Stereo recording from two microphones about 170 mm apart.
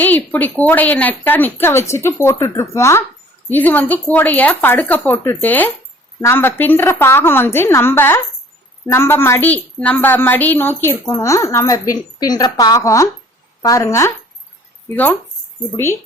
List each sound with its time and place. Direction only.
0.0 s a woman's voice: 10° left (ahead or behind)
15.7 s a woman's voice: 15° left (ahead or behind)